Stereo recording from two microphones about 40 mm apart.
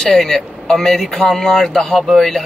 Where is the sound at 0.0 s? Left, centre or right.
Centre.